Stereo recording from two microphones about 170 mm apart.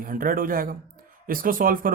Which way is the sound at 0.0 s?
55° right (ahead or behind).